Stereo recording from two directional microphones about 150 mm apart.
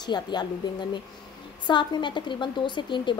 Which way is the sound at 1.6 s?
30° left (ahead or behind).